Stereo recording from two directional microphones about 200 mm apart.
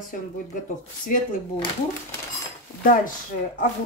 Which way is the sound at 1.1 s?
40° left (ahead or behind).